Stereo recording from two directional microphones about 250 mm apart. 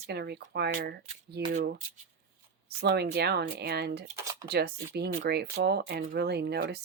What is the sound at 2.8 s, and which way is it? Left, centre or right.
Speech, right.